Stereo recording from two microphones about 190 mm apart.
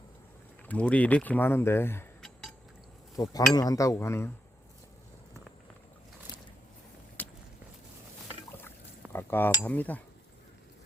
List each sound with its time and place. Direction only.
0.7 s speech: 5° left (ahead or behind)
7.2 s walk: 10° left (ahead or behind)
9.1 s cutlery: 10° left (ahead or behind)